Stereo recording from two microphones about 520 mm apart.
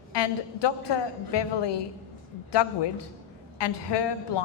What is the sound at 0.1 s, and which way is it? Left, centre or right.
A woman's voice, left.